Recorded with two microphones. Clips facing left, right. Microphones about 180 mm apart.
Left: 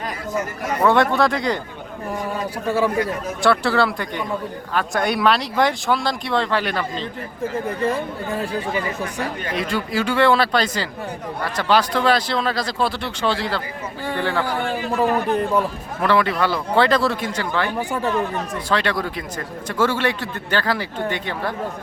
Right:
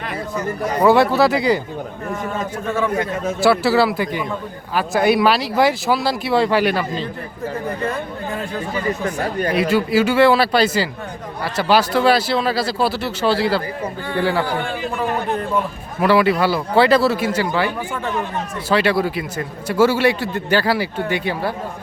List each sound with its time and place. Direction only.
0.6 s a man's voice: 30° right (ahead or behind)
0.9 s speech: 5° right (ahead or behind)
2.6 s a man's voice: 35° left (ahead or behind)
3.4 s speech: 5° right (ahead or behind)
9.6 s a man's voice: 5° right (ahead or behind)
16.0 s a man's voice: 10° right (ahead or behind)
18.7 s a man's voice: 5° right (ahead or behind)